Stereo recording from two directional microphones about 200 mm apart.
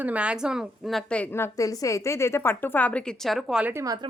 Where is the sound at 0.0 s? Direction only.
5° right (ahead or behind).